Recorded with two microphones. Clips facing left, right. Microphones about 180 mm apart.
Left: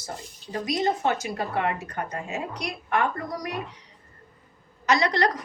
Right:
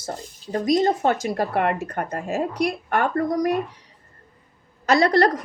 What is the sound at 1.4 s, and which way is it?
Speech, 60° right (ahead or behind).